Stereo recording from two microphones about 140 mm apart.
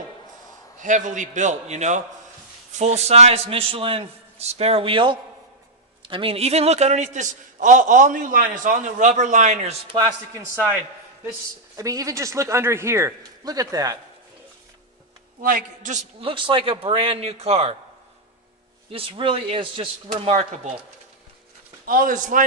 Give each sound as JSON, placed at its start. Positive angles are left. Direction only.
{"t": 0.8, "sound": "a man's voice", "side_deg": -60}
{"t": 9.9, "sound": "a man's voice", "side_deg": -40}
{"t": 10.3, "sound": "a man's voice", "side_deg": -15}
{"t": 11.8, "sound": "a man's voice", "side_deg": -25}
{"t": 15.4, "sound": "a man's voice", "side_deg": -75}
{"t": 16.2, "sound": "a man's voice", "side_deg": -35}
{"t": 18.9, "sound": "a man's voice", "side_deg": -40}
{"t": 21.8, "sound": "a man's voice", "side_deg": -80}